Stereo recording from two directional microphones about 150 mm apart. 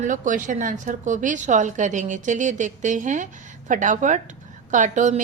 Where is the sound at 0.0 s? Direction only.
60° right (ahead or behind).